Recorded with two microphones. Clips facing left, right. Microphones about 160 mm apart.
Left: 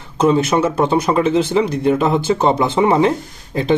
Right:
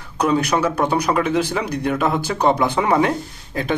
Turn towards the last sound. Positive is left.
turn(degrees=25)  # may be behind; listen again after turning